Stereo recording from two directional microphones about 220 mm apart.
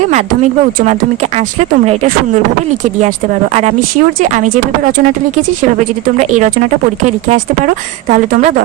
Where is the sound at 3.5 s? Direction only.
35° right (ahead or behind).